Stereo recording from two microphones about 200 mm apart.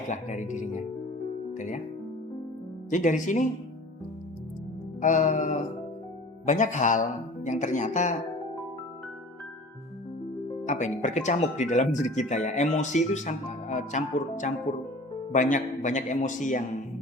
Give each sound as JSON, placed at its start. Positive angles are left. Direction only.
{"t": 0.1, "sound": "speech", "side_deg": 35}
{"t": 2.9, "sound": "speech", "side_deg": 40}
{"t": 4.9, "sound": "speech", "side_deg": 40}
{"t": 10.7, "sound": "speech", "side_deg": 35}